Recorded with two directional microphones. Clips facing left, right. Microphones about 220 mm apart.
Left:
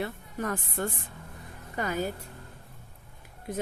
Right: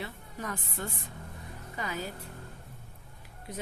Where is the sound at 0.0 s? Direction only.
50° left (ahead or behind).